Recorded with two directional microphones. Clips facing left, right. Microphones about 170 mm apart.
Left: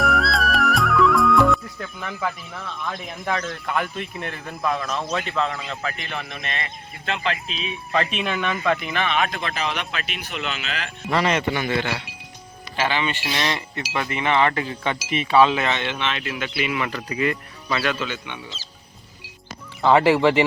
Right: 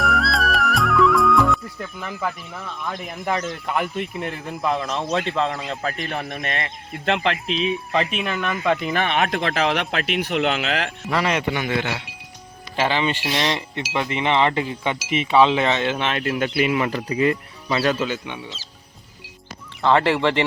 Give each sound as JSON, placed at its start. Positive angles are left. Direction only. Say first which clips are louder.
{"t": 0.0, "sound": "speech", "louder": "even", "side_deg": 0}
{"t": 5.8, "sound": "speech", "louder": "right 4 dB", "side_deg": -40}
{"t": 7.9, "sound": "speech", "louder": "left 1 dB", "side_deg": -10}
{"t": 8.2, "sound": "speech", "louder": "even", "side_deg": 0}
{"t": 8.8, "sound": "speech", "louder": "right 3 dB", "side_deg": -40}
{"t": 9.0, "sound": "speech", "louder": "right 1 dB", "side_deg": -55}
{"t": 11.1, "sound": "speech", "louder": "left 1 dB", "side_deg": -5}
{"t": 12.7, "sound": "speech", "louder": "right 2 dB", "side_deg": -30}
{"t": 19.8, "sound": "speech", "louder": "left 2 dB", "side_deg": 10}